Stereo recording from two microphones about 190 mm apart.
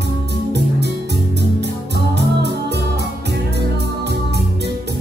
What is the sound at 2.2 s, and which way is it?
Music, 60° right (ahead or behind).